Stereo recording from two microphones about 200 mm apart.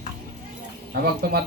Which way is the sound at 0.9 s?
50° right (ahead or behind).